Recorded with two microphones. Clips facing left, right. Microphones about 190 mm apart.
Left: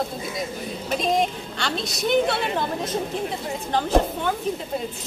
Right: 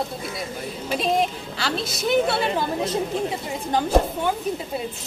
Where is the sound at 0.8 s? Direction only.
5° right (ahead or behind).